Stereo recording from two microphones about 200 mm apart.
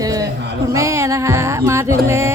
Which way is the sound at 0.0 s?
20° right (ahead or behind).